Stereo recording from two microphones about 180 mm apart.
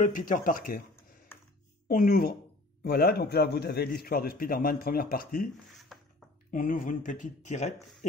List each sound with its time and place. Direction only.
0.0 s speech: 45° left (ahead or behind)
1.9 s a man's voice: 55° left (ahead or behind)
5.7 s a sound: centre (ahead or behind)
6.5 s speech: 50° left (ahead or behind)